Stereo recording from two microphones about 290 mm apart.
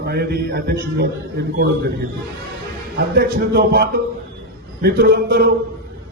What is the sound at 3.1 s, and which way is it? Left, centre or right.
A man's voice, right.